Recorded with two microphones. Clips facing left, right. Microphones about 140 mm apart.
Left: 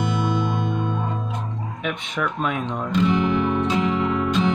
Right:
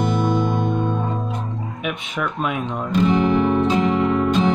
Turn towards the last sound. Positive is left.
turn(degrees=-40)  # may be behind; listen again after turning